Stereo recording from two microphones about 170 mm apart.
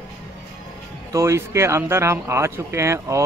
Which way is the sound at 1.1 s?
15° right (ahead or behind).